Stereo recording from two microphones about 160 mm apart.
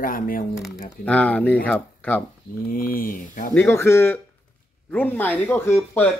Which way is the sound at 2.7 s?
60° left (ahead or behind).